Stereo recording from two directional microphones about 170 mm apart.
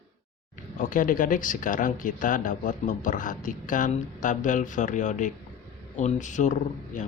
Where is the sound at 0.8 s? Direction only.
50° left (ahead or behind).